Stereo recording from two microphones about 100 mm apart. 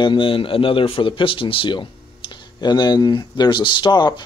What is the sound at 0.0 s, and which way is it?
A man's voice, 55° left (ahead or behind).